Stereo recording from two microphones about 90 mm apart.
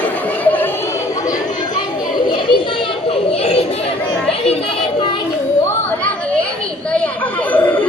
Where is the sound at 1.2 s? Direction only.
50° left (ahead or behind); by 3.9 s 90° left.